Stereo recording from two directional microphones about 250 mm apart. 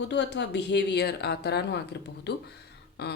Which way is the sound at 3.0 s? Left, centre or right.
Left.